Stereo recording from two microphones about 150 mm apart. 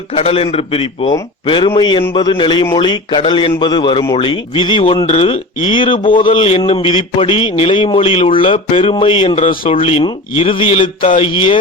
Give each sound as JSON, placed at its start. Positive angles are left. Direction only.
{"t": 0.1, "sound": "a man's voice", "side_deg": 40}